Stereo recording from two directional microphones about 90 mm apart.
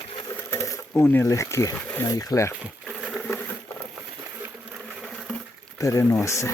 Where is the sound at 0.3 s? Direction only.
35° left (ahead or behind).